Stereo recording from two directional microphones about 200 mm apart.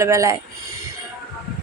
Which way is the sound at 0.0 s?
15° right (ahead or behind).